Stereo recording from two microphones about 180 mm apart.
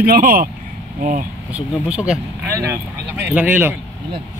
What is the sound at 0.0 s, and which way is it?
Speech, 55° right (ahead or behind).